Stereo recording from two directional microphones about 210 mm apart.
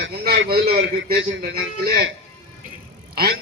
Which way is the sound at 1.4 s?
45° right (ahead or behind).